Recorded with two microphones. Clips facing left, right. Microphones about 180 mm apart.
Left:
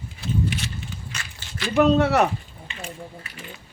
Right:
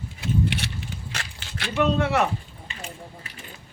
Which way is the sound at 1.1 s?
65° right (ahead or behind).